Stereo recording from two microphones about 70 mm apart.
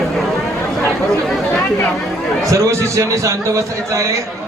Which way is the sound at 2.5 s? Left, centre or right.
Right.